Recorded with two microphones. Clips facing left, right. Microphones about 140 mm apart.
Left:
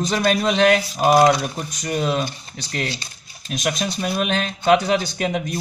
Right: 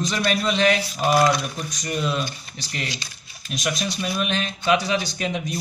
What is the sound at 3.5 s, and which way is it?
A man's voice, 55° left (ahead or behind).